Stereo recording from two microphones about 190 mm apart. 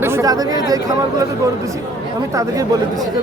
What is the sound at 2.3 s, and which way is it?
Speech, 15° right (ahead or behind).